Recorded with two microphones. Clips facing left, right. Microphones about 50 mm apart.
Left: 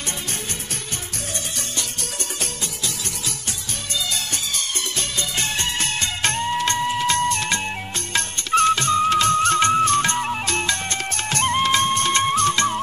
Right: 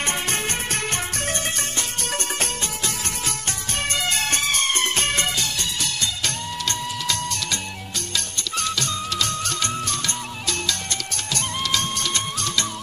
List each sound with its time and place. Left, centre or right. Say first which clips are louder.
3.9 s music: right 2 dB; right
5.4 s music: left 3 dB; left